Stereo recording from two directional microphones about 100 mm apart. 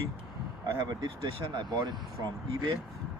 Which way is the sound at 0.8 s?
50° right (ahead or behind).